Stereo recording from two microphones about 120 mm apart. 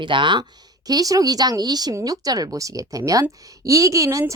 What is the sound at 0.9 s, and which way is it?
Speech, 30° right (ahead or behind).